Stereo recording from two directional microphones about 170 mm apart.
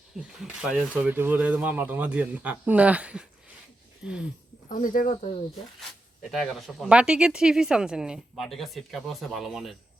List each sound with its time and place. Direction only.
0.2 s speech: 5° right (ahead or behind)
4.7 s speech: 50° left (ahead or behind)
6.3 s speech: centre (ahead or behind)